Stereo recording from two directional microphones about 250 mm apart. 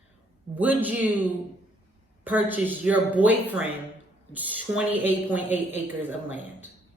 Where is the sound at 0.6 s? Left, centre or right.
Centre.